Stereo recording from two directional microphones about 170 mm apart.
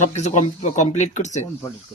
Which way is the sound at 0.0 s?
40° left (ahead or behind).